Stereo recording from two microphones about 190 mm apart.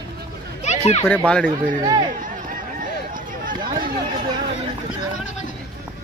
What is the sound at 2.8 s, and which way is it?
Run, 45° right (ahead or behind).